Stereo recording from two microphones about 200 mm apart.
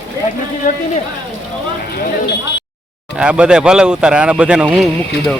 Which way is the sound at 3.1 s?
5° right (ahead or behind).